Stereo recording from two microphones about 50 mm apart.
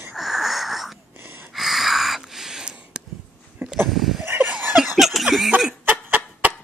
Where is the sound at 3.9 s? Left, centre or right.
Centre.